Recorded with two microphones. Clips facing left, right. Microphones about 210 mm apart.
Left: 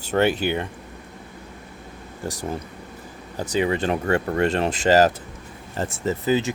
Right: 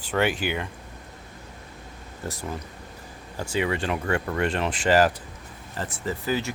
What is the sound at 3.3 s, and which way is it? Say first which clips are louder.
Speech: left 4 dB; 20° left (ahead or behind).